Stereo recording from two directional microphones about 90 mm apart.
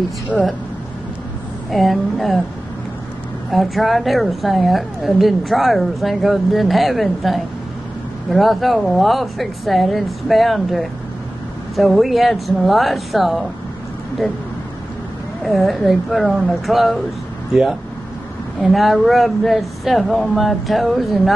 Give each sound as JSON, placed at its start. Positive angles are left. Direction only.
{"t": 1.7, "sound": "a woman's voice", "side_deg": 0}
{"t": 3.5, "sound": "a woman's voice", "side_deg": 0}
{"t": 15.4, "sound": "a woman's voice", "side_deg": 0}
{"t": 18.6, "sound": "a woman's voice", "side_deg": 0}